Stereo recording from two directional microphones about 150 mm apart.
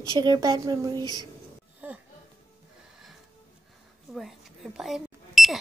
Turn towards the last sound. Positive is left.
turn(degrees=0)  # may be behind; listen again after turning